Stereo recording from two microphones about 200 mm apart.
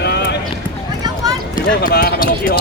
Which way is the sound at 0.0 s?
55° left (ahead or behind).